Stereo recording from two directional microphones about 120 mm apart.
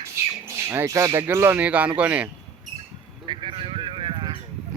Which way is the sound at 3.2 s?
45° right (ahead or behind).